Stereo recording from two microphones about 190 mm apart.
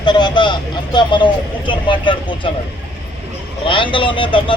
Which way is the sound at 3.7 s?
25° left (ahead or behind).